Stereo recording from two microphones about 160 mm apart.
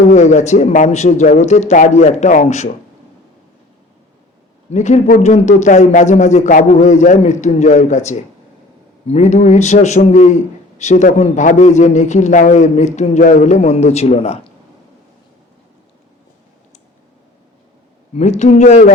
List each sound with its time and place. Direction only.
0.1 s a man's voice: 45° left (ahead or behind)
4.7 s a man's voice: 45° left (ahead or behind)
18.1 s a man's voice: 45° left (ahead or behind)